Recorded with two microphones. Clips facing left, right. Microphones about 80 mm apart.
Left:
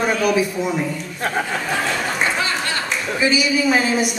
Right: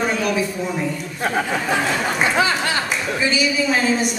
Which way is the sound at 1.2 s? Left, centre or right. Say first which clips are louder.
Right 1 dB; centre.